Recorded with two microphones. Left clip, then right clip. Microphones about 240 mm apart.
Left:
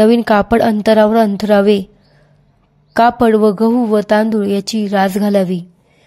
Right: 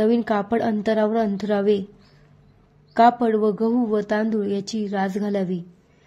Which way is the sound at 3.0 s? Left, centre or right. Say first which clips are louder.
Left 6 dB; left.